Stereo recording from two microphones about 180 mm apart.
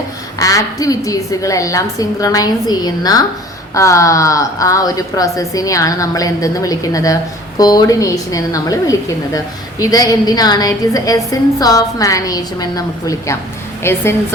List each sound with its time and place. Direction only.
0.3 s a woman's voice: 20° left (ahead or behind)